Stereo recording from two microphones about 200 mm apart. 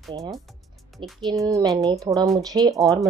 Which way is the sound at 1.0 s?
25° right (ahead or behind).